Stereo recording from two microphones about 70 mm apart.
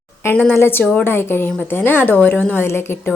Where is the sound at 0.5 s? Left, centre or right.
Left.